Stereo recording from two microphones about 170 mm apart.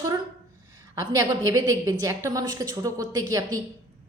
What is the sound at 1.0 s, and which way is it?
A woman's voice, 20° right (ahead or behind).